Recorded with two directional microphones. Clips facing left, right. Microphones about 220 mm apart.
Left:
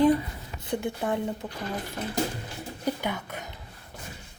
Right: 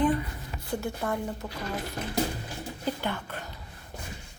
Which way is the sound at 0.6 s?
20° left (ahead or behind).